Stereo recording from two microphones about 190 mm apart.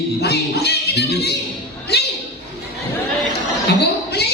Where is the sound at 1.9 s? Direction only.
60° left (ahead or behind).